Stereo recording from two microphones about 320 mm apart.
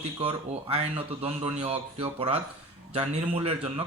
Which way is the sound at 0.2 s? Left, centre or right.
Centre.